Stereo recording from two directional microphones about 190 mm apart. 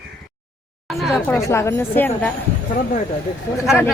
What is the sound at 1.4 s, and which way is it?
Speech, 15° left (ahead or behind).